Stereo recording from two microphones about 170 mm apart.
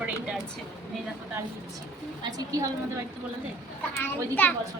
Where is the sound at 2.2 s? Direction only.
20° right (ahead or behind).